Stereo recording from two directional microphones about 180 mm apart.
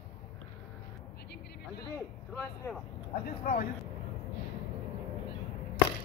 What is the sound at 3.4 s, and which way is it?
Speech, 60° left (ahead or behind).